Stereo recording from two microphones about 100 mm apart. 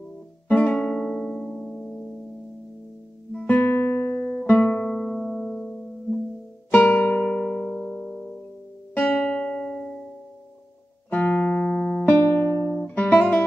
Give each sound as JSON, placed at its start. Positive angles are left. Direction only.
{"t": 0.5, "sound": "music", "side_deg": 15}
{"t": 3.3, "sound": "music", "side_deg": 15}
{"t": 11.1, "sound": "music", "side_deg": 10}
{"t": 12.1, "sound": "music", "side_deg": 20}
{"t": 12.8, "sound": "guitar", "side_deg": 15}